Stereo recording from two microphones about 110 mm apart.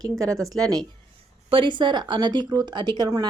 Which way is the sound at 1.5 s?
50° right (ahead or behind).